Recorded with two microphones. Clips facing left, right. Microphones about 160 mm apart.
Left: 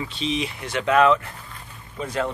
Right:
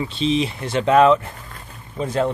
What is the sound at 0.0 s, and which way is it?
Speech, 30° right (ahead or behind).